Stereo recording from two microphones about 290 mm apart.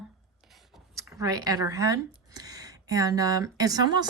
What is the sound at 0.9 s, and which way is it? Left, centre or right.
A woman's voice, centre.